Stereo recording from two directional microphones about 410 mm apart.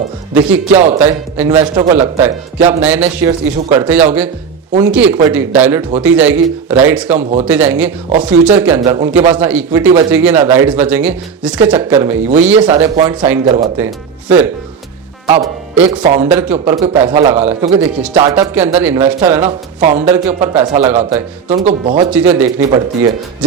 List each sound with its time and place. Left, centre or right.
0.9 s speech: centre
16.2 s speech: centre
19.8 s speech: centre
22.1 s speech: centre